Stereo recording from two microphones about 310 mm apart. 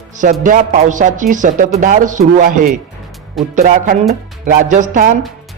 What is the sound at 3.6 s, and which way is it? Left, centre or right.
Speech, right.